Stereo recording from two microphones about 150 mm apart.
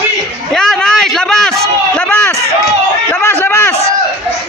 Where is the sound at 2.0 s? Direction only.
10° left (ahead or behind).